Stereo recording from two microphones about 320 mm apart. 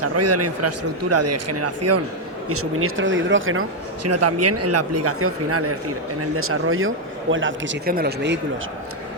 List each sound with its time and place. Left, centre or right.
0.0 s speech: right